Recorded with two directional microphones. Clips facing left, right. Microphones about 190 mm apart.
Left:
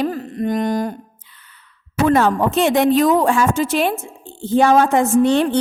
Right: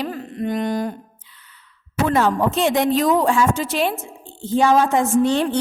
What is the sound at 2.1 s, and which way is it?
A woman's voice, 55° left (ahead or behind).